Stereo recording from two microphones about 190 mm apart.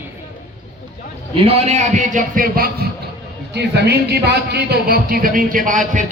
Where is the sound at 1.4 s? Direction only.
30° right (ahead or behind); by 2.7 s 45° right (ahead or behind).